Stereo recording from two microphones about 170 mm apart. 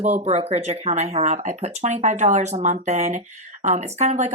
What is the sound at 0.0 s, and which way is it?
A woman's voice, 40° right (ahead or behind).